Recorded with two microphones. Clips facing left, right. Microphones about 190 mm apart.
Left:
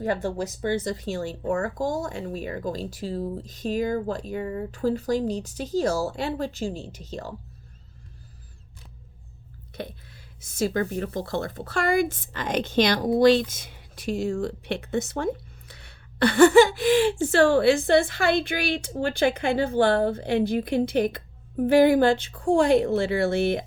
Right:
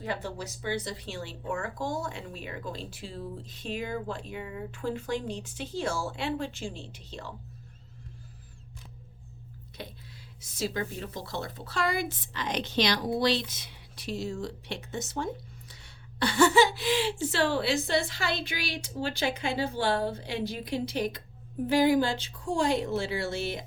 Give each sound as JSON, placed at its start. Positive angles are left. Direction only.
{"t": 0.0, "sound": "speech", "side_deg": 50}
{"t": 9.8, "sound": "speech", "side_deg": 55}